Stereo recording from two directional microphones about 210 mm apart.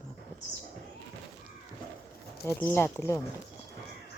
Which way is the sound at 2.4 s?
10° left (ahead or behind).